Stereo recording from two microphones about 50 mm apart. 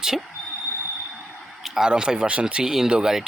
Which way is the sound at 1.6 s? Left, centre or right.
Centre.